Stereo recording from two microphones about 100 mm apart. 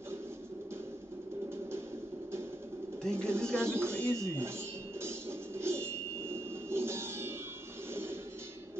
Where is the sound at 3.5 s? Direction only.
25° right (ahead or behind).